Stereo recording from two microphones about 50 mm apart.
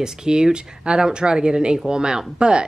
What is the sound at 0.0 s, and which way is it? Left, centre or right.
Speech, centre.